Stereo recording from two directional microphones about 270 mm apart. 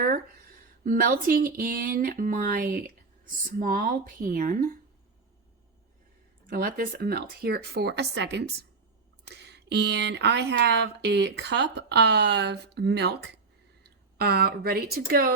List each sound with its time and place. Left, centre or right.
0.9 s speech: right
6.5 s speech: right